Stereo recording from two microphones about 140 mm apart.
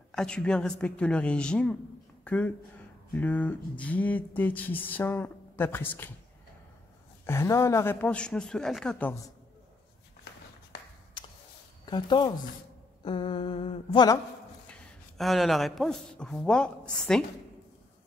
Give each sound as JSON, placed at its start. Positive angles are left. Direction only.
{"t": 0.1, "sound": "speech", "side_deg": 5}
{"t": 7.2, "sound": "speech", "side_deg": 20}
{"t": 11.2, "sound": "a sound", "side_deg": 35}
{"t": 11.8, "sound": "speech", "side_deg": 30}
{"t": 13.0, "sound": "mantra", "side_deg": 35}
{"t": 14.7, "sound": "speech", "side_deg": 0}